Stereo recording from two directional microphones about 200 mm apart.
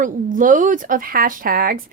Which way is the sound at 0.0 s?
40° right (ahead or behind).